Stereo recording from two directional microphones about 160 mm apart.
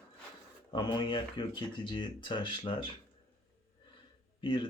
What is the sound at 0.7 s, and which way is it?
Speech, 30° left (ahead or behind).